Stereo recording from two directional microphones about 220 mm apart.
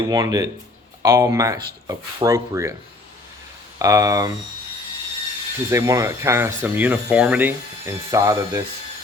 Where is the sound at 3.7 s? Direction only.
15° right (ahead or behind).